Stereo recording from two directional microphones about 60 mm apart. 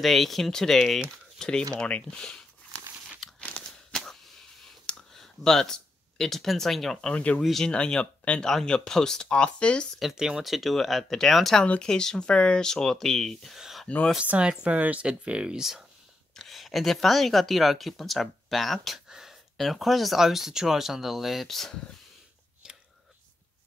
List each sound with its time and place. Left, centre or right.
0.0 s speech: centre
3.6 s a sound: centre
7.2 s speech: left
9.9 s speech: centre
13.6 s a sound: centre
14.1 s speech: right
16.3 s speech: centre
19.0 s speech: centre